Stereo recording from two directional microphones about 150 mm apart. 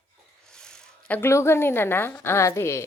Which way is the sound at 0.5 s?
5° left (ahead or behind).